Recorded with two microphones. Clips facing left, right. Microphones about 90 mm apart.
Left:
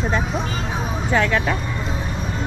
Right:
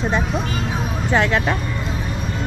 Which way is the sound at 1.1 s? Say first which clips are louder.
Right 1 dB; 35° right (ahead or behind).